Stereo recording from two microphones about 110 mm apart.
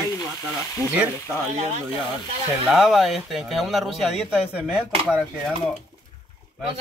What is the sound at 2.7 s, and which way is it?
Speech, 5° right (ahead or behind).